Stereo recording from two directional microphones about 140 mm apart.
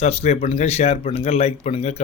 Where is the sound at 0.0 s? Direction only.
50° left (ahead or behind).